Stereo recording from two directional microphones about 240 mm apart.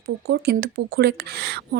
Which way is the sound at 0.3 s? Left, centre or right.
Right.